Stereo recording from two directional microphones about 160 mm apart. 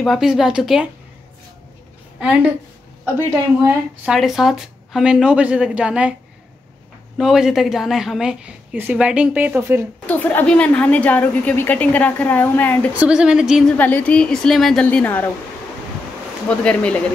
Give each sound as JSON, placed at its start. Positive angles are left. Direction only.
{"t": 0.0, "sound": "a woman's voice", "side_deg": 0}
{"t": 2.1, "sound": "a woman's voice", "side_deg": -5}
{"t": 4.0, "sound": "a woman's voice", "side_deg": 0}
{"t": 7.2, "sound": "a woman's voice", "side_deg": -5}
{"t": 10.0, "sound": "a woman's voice", "side_deg": 10}
{"t": 12.9, "sound": "a woman's voice", "side_deg": -10}
{"t": 13.7, "sound": "a woman's voice", "side_deg": 10}
{"t": 16.4, "sound": "a woman's voice", "side_deg": 10}